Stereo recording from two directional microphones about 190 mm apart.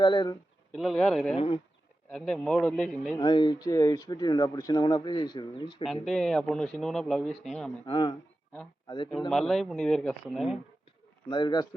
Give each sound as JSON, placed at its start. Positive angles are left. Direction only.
{"t": 0.0, "sound": "speech", "side_deg": 25}
{"t": 0.7, "sound": "speech", "side_deg": 0}
{"t": 3.2, "sound": "speech", "side_deg": 25}
{"t": 5.8, "sound": "speech", "side_deg": 0}
{"t": 7.9, "sound": "speech", "side_deg": 25}
{"t": 9.3, "sound": "speech", "side_deg": 0}
{"t": 11.3, "sound": "speech", "side_deg": 25}